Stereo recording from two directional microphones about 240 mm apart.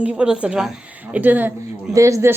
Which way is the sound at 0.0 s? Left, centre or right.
Centre.